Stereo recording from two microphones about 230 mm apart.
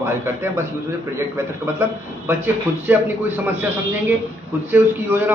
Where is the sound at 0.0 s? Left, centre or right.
Centre.